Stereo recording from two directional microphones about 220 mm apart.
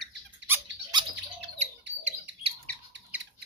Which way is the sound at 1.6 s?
30° right (ahead or behind).